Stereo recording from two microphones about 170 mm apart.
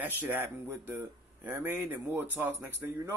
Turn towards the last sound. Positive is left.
turn(degrees=-15)  # may be behind; listen again after turning